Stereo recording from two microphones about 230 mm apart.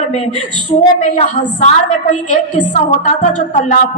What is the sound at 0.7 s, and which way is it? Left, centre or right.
A woman's voice, left.